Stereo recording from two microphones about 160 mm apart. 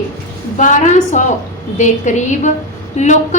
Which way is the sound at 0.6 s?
50° left (ahead or behind).